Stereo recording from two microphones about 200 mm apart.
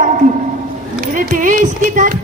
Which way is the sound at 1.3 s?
40° right (ahead or behind).